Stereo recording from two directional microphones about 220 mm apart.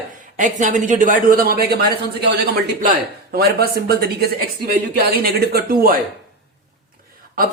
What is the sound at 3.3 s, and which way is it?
Speech, 45° right (ahead or behind).